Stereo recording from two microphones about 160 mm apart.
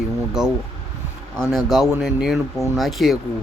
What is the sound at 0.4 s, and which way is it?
Speech, 5° right (ahead or behind).